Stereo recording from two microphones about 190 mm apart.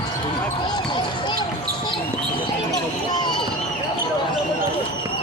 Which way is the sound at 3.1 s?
25° left (ahead or behind).